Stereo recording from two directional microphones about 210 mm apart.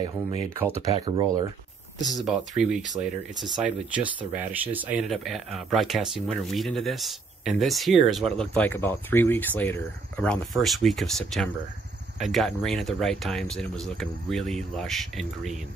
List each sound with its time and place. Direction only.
0.0 s speech: 20° right (ahead or behind)
2.0 s speech: centre (ahead or behind)